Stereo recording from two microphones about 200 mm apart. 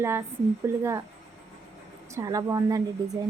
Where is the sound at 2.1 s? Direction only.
15° right (ahead or behind).